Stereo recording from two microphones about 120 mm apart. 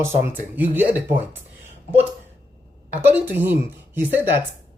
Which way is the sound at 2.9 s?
15° right (ahead or behind).